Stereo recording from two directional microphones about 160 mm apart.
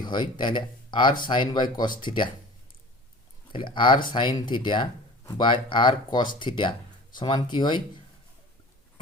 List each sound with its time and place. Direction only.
0.0 s speech: 30° left (ahead or behind)
3.5 s speech: 30° left (ahead or behind)